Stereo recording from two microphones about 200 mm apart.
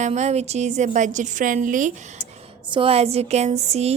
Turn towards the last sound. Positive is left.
turn(degrees=-35)  # may be behind; listen again after turning